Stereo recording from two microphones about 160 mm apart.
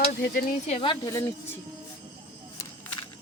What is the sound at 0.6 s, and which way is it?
Speech, 40° left (ahead or behind).